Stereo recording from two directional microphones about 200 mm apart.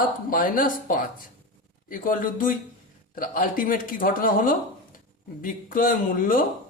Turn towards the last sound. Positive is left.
turn(degrees=45)  # may be behind; listen again after turning